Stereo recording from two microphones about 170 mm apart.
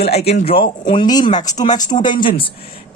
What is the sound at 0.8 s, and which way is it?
Speech, 25° left (ahead or behind).